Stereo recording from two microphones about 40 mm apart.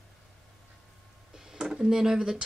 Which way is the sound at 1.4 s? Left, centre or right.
Centre.